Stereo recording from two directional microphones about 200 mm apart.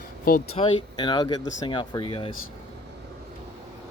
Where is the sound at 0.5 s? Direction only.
25° left (ahead or behind).